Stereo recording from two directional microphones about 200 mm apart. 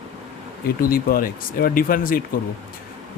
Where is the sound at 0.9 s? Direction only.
45° left (ahead or behind).